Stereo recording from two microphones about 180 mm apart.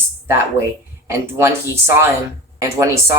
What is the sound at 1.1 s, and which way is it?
Speech, 15° right (ahead or behind).